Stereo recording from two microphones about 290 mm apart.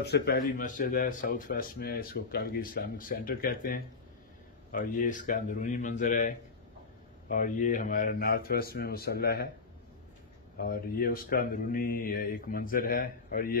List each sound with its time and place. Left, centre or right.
0.0 s speech: left
10.6 s speech: left